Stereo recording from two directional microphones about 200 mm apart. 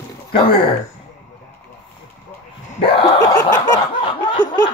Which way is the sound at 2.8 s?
20° left (ahead or behind).